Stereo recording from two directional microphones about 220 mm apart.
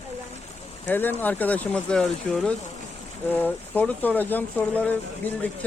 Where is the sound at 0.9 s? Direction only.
10° left (ahead or behind).